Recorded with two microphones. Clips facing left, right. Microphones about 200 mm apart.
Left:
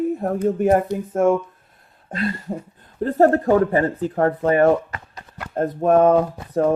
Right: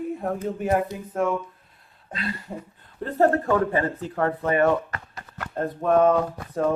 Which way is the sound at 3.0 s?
40° left (ahead or behind).